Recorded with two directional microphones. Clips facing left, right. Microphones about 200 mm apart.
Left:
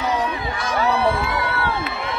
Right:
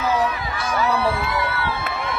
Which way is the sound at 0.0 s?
30° left (ahead or behind).